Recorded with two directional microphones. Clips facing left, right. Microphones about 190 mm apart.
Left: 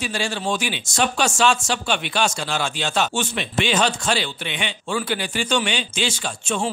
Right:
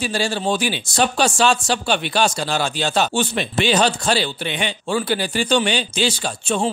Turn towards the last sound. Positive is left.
turn(degrees=-35)  # may be behind; listen again after turning